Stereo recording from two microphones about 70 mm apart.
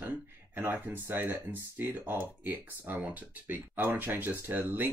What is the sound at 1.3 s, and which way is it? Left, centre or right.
Speech, right.